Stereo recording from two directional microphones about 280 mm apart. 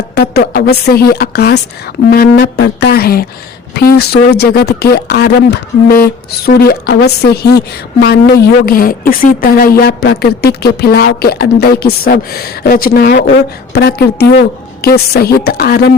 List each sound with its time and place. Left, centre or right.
0.1 s a woman's voice: left